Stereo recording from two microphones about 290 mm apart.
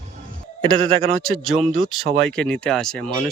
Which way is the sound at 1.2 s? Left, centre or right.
Centre.